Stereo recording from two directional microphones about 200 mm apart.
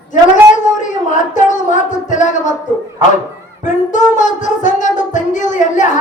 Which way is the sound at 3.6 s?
40° left (ahead or behind).